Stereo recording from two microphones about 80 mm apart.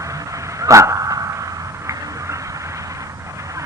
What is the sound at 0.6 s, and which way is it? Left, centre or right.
Dog, right.